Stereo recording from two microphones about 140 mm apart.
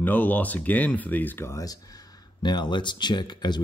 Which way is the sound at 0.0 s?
10° left (ahead or behind).